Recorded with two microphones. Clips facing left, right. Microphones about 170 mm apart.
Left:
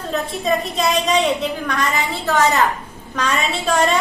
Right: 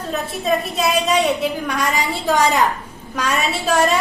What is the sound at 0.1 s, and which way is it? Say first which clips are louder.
A woman's voice: even; 5° right (ahead or behind).